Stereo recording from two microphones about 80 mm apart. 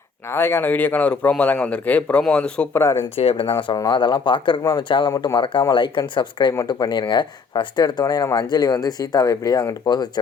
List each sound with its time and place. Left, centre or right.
0.3 s a man's voice: left; by 2.6 s centre
2.7 s speech: left
3.5 s speech: left
3.9 s speech: left
5.2 s speech: left
6.7 s speech: left
8.4 s speech: left